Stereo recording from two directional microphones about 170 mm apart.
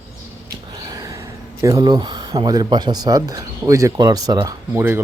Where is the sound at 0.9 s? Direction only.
20° right (ahead or behind).